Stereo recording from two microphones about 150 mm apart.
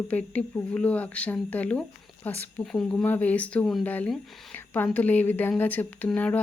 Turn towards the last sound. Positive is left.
turn(degrees=10)  # may be behind; listen again after turning